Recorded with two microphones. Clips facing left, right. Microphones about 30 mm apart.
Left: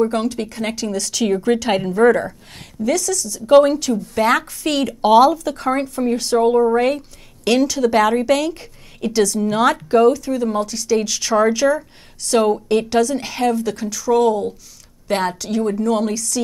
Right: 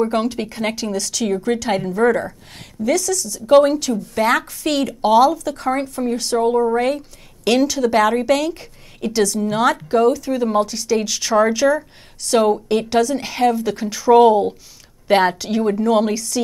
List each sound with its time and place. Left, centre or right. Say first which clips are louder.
0.0 s a woman's voice: even; centre
10.3 s a woman's voice: right 2 dB; centre
13.8 s speech: right 5 dB; right
15.0 s a woman's voice: right 5 dB; centre